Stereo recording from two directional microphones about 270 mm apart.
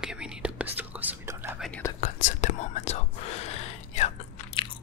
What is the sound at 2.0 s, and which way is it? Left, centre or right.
Whispering, left.